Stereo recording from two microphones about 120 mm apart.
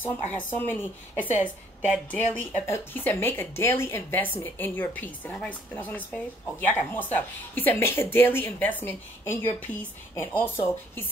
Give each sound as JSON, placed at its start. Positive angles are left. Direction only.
{"t": 0.0, "sound": "a woman's voice", "side_deg": 15}